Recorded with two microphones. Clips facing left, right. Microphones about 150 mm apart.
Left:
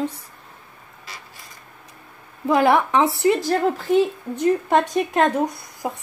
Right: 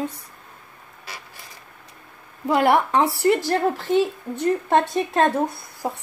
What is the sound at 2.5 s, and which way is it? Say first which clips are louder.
A woman's voice: left 1 dB; 20° left (ahead or behind).